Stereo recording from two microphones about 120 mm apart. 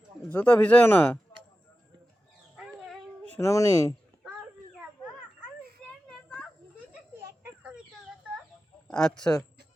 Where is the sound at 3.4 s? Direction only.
25° left (ahead or behind).